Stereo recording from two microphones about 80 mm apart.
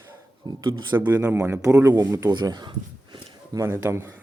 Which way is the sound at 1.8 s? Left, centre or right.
Right.